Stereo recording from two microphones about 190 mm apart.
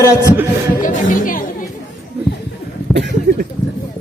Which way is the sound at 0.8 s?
45° left (ahead or behind).